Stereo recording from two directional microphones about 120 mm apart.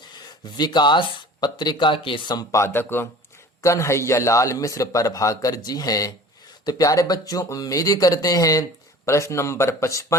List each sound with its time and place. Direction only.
0.1 s a man's voice: 35° left (ahead or behind)